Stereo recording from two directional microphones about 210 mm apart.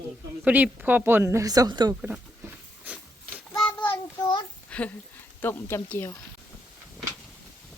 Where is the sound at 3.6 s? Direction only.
5° left (ahead or behind).